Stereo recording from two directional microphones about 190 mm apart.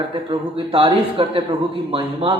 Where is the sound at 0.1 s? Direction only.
25° right (ahead or behind).